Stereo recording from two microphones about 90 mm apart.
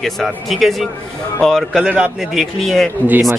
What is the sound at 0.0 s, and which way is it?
A man's voice, centre (ahead or behind).